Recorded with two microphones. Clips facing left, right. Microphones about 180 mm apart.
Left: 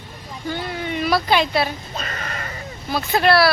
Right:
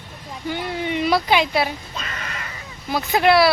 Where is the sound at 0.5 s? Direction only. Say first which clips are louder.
Right 2 dB; 20° right (ahead or behind).